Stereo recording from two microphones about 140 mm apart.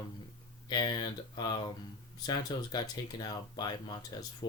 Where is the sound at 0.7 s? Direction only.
30° left (ahead or behind).